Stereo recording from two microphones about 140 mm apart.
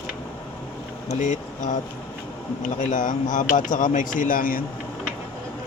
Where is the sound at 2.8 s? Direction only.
65° left (ahead or behind); by 4.7 s 90° left.